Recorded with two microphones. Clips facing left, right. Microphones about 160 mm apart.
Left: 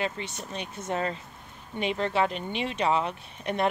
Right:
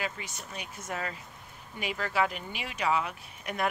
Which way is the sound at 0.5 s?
30° left (ahead or behind).